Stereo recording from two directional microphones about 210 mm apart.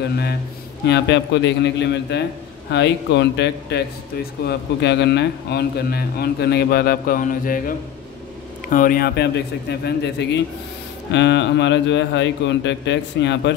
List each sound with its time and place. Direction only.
0.8 s a man's voice: 55° left (ahead or behind)